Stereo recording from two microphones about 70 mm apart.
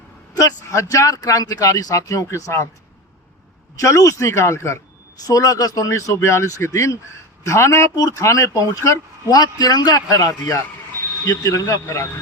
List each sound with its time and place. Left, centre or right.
0.3 s speech: left
3.8 s speech: left
5.2 s speech: left
5.9 s speech: left
9.4 s a man's voice: left